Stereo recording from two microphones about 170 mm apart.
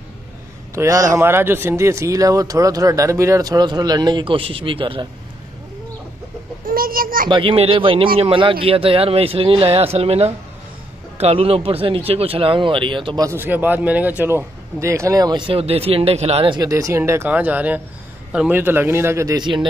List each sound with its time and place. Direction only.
0.7 s speech: 20° right (ahead or behind)
6.6 s a sound: 60° right (ahead or behind)
7.2 s speech: 30° right (ahead or behind)